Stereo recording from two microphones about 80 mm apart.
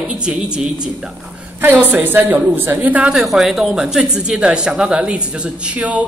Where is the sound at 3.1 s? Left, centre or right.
Centre.